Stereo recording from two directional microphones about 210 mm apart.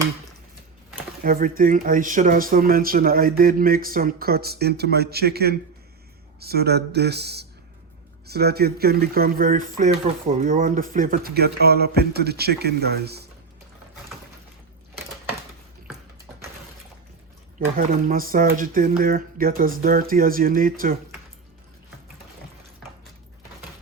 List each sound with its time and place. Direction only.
1.2 s speech: 45° right (ahead or behind)
17.7 s speech: 45° right (ahead or behind)